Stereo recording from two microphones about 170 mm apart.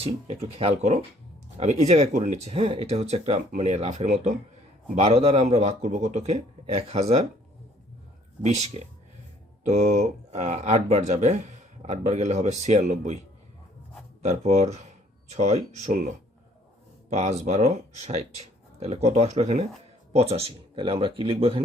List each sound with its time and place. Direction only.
0.4 s a man's voice: 40° right (ahead or behind)
8.4 s a man's voice: 40° right (ahead or behind)
14.2 s a man's voice: 40° right (ahead or behind)